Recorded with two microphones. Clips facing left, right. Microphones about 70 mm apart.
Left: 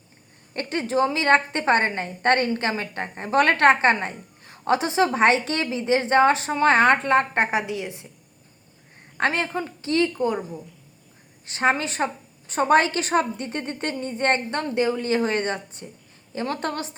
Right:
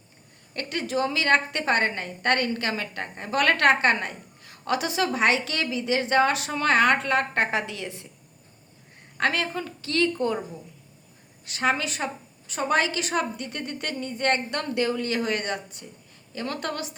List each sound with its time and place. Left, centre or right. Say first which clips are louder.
0.5 s a woman's voice: left 4 dB; left
9.1 s a woman's voice: left 2 dB; left
11.4 s a woman's voice: left 3 dB; left